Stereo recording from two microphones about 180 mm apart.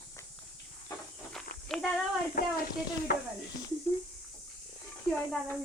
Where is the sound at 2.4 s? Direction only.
55° left (ahead or behind).